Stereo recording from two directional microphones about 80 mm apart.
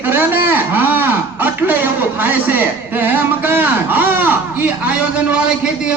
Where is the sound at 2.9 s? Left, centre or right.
Right.